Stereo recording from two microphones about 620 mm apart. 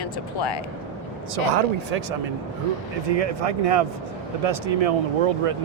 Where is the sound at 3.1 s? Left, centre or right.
Right.